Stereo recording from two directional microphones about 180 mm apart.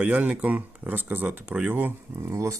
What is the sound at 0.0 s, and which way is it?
Speech, 5° right (ahead or behind).